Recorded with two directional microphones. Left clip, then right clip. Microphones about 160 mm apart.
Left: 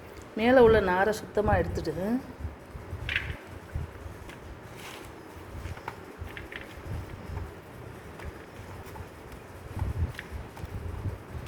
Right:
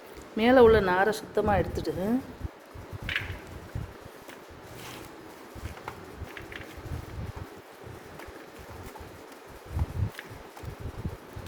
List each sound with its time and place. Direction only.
0.3 s speech: 15° right (ahead or behind)